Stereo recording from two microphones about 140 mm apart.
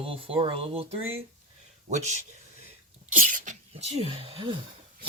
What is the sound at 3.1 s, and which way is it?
Sneeze, 70° right (ahead or behind).